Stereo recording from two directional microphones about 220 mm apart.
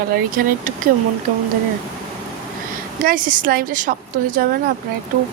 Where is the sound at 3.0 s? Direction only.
40° right (ahead or behind).